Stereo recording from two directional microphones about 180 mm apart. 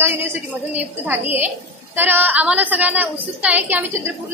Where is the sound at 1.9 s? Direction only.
10° right (ahead or behind).